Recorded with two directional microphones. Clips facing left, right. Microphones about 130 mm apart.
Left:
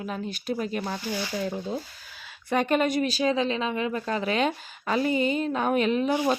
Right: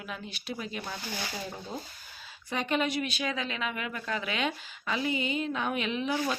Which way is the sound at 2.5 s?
50° left (ahead or behind).